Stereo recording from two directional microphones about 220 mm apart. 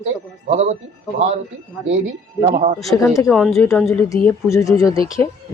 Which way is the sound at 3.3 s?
Centre (ahead or behind).